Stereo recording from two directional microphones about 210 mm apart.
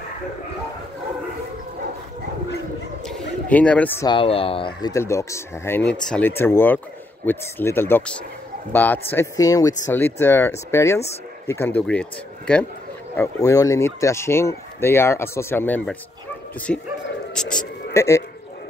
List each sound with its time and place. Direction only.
3.1 s speech: 5° left (ahead or behind)
4.1 s speech: 25° left (ahead or behind)
4.9 s speech: 15° left (ahead or behind)